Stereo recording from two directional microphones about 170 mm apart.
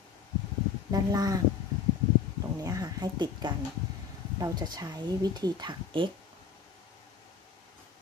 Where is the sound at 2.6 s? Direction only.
20° right (ahead or behind).